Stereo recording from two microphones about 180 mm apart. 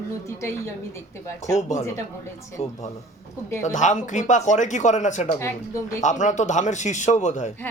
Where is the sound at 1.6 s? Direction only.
40° left (ahead or behind).